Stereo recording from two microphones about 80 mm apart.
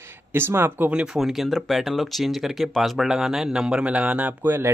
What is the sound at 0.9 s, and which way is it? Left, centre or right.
Speech, centre.